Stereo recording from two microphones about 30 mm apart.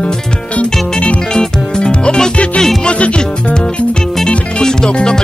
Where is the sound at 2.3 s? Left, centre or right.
Left.